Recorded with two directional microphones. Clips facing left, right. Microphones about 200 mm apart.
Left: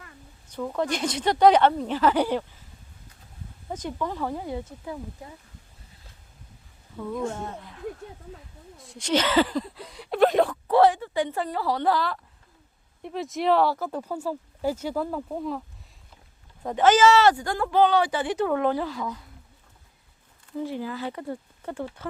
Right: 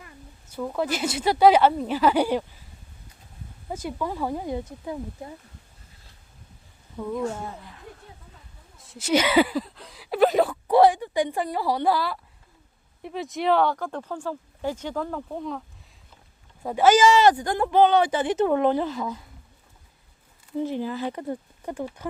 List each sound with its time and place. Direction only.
0.0 s speech: 5° right (ahead or behind)
3.7 s speech: 10° right (ahead or behind)
7.0 s speech: 5° right (ahead or behind)
16.6 s speech: 10° right (ahead or behind)
20.6 s speech: 20° right (ahead or behind)